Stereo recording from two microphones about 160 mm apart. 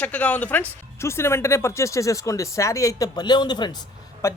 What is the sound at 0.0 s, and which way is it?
Speech, 10° left (ahead or behind).